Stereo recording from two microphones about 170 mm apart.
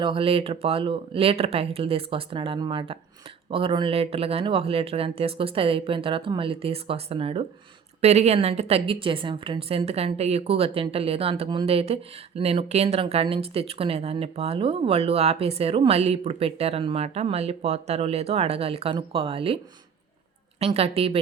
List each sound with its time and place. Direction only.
0.0 s speech: 30° right (ahead or behind)
20.6 s speech: 35° right (ahead or behind)